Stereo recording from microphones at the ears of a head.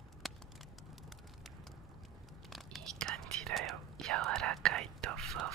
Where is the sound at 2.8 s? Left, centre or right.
Right.